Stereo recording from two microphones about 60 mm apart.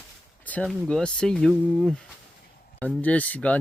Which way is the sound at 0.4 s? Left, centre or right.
Left.